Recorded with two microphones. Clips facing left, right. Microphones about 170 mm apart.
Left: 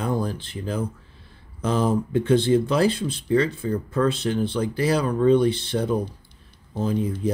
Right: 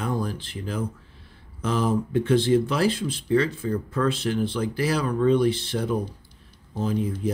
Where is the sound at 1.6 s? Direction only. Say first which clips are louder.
Left 2 dB; 35° left (ahead or behind).